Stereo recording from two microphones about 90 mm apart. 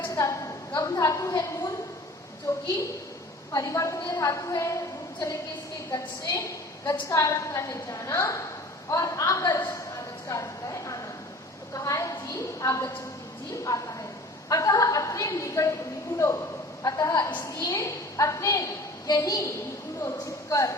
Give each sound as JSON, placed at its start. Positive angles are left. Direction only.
{"t": 0.2, "sound": "a woman's voice", "side_deg": 35}
{"t": 2.5, "sound": "a woman's voice", "side_deg": 30}
{"t": 5.9, "sound": "a woman's voice", "side_deg": 40}